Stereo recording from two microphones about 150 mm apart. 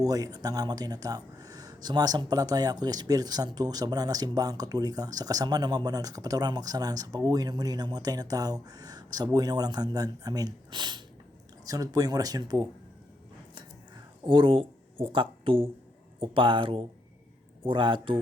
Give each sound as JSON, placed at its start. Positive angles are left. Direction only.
{"t": 0.0, "sound": "speech", "side_deg": -25}
{"t": 14.3, "sound": "speech", "side_deg": -35}